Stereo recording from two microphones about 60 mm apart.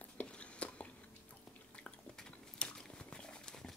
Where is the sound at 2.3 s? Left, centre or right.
Centre.